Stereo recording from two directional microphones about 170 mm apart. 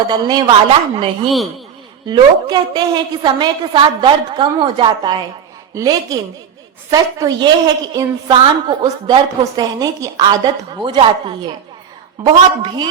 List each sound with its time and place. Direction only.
0.1 s a woman's voice: 25° right (ahead or behind)
1.3 s speech: centre (ahead or behind)
2.0 s a woman's voice: 25° right (ahead or behind)